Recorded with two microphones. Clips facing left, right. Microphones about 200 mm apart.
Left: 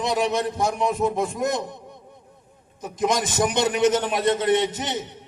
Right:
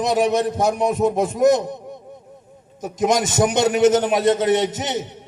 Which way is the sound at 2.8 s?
45° right (ahead or behind).